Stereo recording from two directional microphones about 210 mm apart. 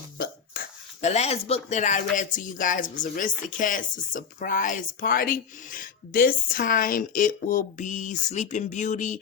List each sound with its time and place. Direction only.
1.0 s speech: 30° left (ahead or behind)